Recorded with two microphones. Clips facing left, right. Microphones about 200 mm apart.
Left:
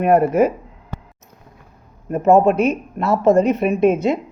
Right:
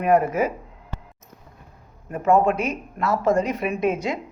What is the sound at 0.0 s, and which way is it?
Speech, 65° left (ahead or behind).